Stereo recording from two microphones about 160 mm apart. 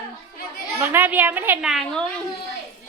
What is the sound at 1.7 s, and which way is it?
Speech, centre (ahead or behind).